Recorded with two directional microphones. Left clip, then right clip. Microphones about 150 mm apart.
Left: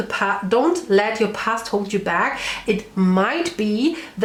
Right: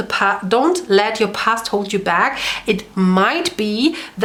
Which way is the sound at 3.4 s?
45° right (ahead or behind).